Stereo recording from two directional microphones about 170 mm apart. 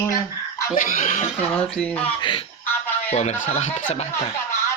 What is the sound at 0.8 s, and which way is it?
Speech, 55° left (ahead or behind).